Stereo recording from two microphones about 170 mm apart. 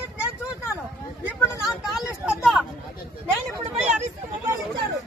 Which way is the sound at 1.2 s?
Centre (ahead or behind).